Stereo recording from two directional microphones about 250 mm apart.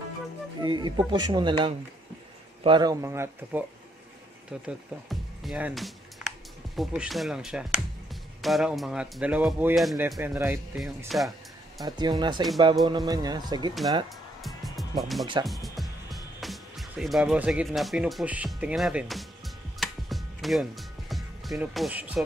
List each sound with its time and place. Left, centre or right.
0.6 s speech: centre
11.8 s speech: centre
14.4 s music: centre
16.3 s speech: centre
19.8 s music: centre